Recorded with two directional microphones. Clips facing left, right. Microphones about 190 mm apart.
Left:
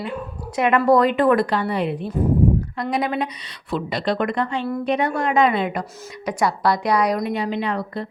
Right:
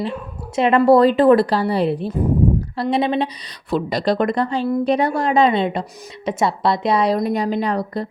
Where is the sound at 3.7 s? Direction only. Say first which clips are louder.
Right 4 dB; 40° right (ahead or behind).